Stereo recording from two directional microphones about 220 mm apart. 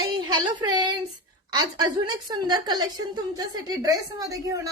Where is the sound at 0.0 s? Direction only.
20° right (ahead or behind).